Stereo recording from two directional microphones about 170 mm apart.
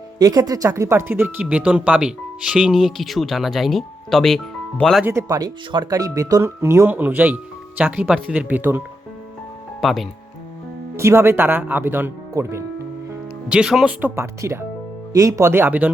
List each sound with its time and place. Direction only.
0.2 s speech: 20° right (ahead or behind); by 5.0 s centre (ahead or behind)
5.0 s speech: 20° right (ahead or behind)
9.8 s speech: centre (ahead or behind)
10.9 s speech: 15° right (ahead or behind)
13.5 s speech: 5° right (ahead or behind)